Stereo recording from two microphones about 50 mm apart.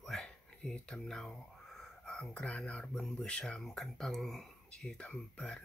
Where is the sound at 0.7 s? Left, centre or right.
Left.